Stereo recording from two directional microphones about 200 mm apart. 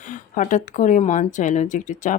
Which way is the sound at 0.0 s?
40° left (ahead or behind).